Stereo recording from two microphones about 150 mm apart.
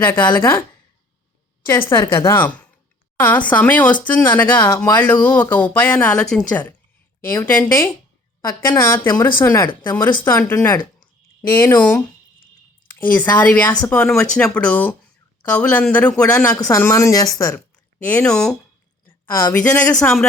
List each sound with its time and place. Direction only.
0.0 s speech: 15° left (ahead or behind)
1.9 s speech: 20° left (ahead or behind)
9.1 s speech: 10° left (ahead or behind)